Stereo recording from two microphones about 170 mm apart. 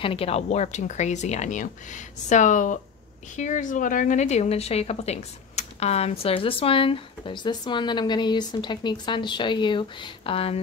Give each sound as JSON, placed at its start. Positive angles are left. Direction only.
{"t": 0.0, "sound": "a woman's voice", "side_deg": 35}